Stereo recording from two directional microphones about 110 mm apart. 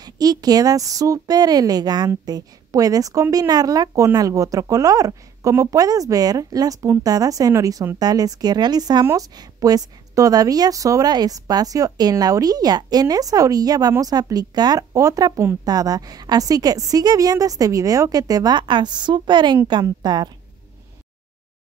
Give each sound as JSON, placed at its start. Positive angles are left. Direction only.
{"t": 0.0, "sound": "a woman's voice", "side_deg": -35}